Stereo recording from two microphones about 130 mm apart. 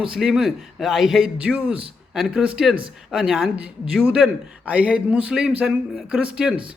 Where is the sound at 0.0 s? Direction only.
5° right (ahead or behind).